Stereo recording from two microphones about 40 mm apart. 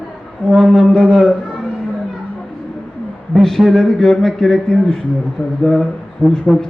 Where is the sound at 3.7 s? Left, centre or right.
Centre.